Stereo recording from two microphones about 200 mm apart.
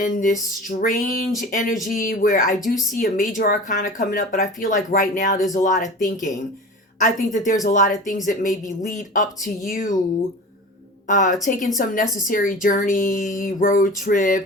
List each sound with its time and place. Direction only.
0.0 s speech: 40° left (ahead or behind)
11.1 s speech: 40° left (ahead or behind)